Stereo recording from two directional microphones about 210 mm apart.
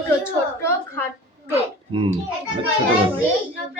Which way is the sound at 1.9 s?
25° right (ahead or behind).